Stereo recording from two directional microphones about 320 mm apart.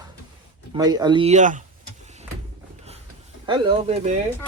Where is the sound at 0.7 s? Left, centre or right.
Centre.